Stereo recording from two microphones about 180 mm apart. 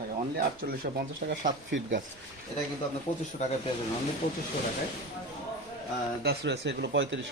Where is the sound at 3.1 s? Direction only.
25° left (ahead or behind).